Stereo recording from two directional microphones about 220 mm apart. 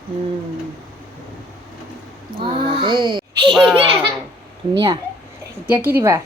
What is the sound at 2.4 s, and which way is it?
A child's voice, 20° right (ahead or behind).